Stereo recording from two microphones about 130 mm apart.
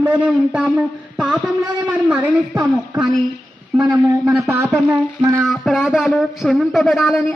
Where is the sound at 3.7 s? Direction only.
10° right (ahead or behind).